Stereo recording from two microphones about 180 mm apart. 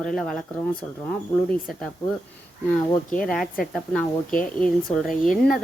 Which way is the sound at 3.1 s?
50° left (ahead or behind).